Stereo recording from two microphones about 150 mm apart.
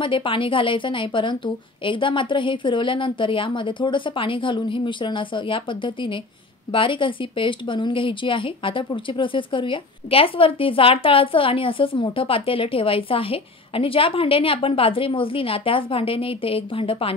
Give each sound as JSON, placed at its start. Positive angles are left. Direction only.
{"t": 0.0, "sound": "speech", "side_deg": 35}